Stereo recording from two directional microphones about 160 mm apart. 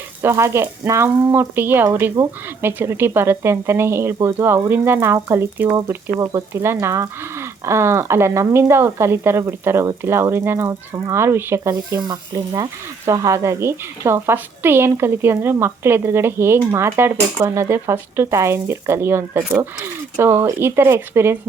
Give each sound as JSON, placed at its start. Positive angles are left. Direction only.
{"t": 0.2, "sound": "speech", "side_deg": -15}